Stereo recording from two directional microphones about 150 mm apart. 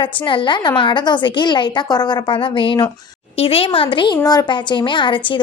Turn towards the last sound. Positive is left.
turn(degrees=35)  # may be behind; listen again after turning